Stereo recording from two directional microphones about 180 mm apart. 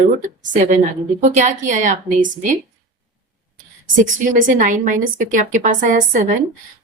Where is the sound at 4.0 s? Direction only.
45° right (ahead or behind).